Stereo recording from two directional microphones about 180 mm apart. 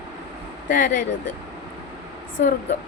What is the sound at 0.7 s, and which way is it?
Speech, 45° left (ahead or behind).